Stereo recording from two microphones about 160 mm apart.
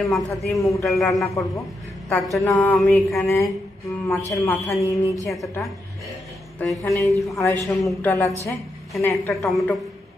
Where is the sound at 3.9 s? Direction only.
20° left (ahead or behind).